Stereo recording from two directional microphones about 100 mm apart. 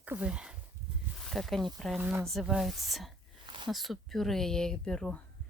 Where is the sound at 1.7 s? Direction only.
Centre (ahead or behind).